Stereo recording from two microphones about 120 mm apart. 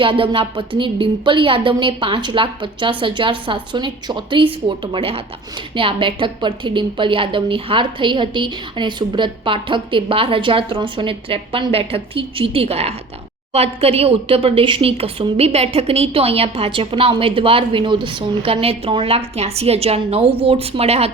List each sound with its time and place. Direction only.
0.0 s a woman's voice: 45° right (ahead or behind)